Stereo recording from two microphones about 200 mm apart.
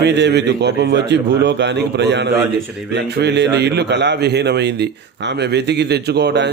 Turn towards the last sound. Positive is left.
turn(degrees=-60)  # may be behind; listen again after turning